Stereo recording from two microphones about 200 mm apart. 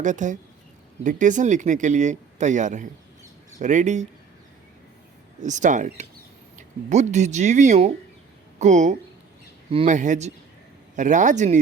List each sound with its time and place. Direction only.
0.0 s speech: 40° right (ahead or behind)
5.4 s speech: 40° right (ahead or behind)